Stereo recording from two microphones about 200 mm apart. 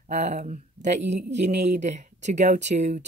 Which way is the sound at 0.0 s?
35° right (ahead or behind).